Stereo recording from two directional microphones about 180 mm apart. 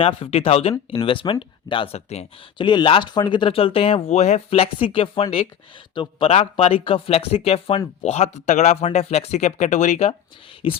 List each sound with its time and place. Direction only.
0.0 s speech: 30° left (ahead or behind)